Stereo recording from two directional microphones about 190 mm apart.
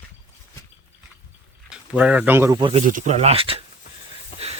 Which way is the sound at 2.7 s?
40° right (ahead or behind).